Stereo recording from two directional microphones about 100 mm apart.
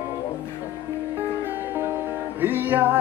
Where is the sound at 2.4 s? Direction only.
20° right (ahead or behind).